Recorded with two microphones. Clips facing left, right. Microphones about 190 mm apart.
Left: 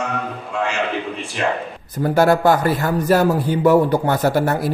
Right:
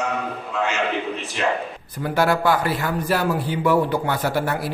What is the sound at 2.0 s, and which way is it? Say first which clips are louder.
A man's voice: left 5 dB; 40° left (ahead or behind).